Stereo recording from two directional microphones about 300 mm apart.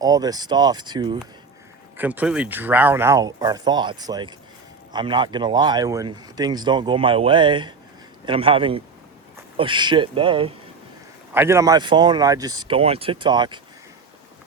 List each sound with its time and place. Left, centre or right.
0.0 s speech: centre